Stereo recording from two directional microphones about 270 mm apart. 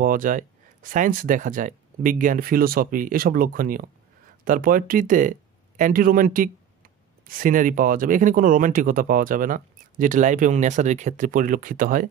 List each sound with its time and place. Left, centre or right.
0.0 s speech: right